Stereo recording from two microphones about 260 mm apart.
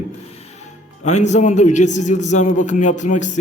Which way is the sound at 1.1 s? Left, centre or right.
Left.